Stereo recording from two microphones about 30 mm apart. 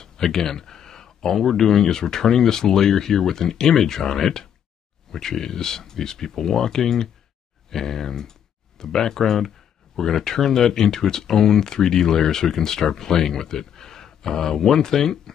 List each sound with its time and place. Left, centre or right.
0.0 s speech: centre